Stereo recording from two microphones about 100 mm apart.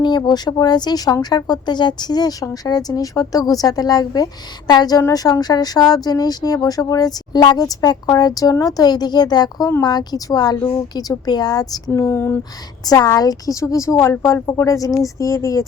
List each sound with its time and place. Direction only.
0.0 s speech: 45° left (ahead or behind)
11.9 s speech: 25° left (ahead or behind)
12.8 s speech: 40° left (ahead or behind)